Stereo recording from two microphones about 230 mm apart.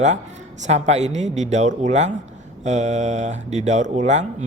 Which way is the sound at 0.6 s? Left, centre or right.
Right.